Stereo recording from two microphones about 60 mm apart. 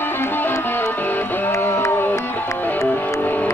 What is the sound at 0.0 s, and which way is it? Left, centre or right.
Music, left.